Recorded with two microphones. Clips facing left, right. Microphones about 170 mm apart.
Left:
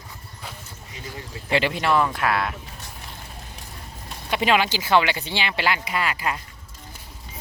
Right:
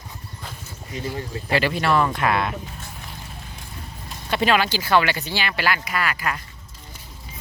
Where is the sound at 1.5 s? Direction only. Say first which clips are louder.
Even; 20° left (ahead or behind); by 2.5 s 5° left (ahead or behind).